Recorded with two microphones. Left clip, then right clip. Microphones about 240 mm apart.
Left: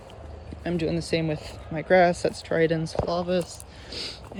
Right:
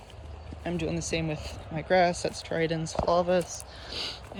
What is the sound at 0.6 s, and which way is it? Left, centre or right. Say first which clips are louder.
Speech: left 4 dB; centre.